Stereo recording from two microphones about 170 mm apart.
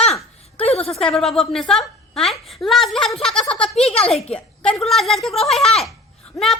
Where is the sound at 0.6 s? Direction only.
35° left (ahead or behind).